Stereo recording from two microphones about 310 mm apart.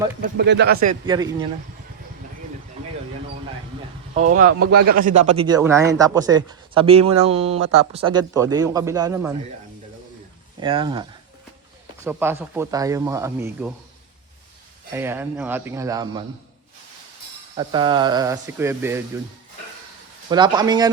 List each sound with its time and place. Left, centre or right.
0.2 s speech: right
1.0 s speech: centre
4.1 s speech: right
10.6 s speech: centre
12.0 s speech: centre
14.9 s speech: centre
17.5 s speech: centre
20.3 s speech: centre